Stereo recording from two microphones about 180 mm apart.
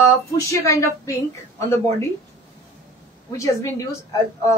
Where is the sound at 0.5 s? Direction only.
15° left (ahead or behind).